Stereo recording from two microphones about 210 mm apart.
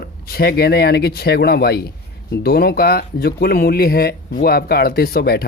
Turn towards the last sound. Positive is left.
turn(degrees=45)  # may be behind; listen again after turning